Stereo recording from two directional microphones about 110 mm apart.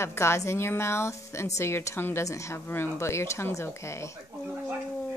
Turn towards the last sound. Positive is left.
turn(degrees=25)  # may be behind; listen again after turning